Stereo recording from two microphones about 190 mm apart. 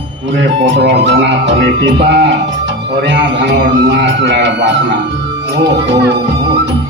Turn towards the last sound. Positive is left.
turn(degrees=-65)  # may be behind; listen again after turning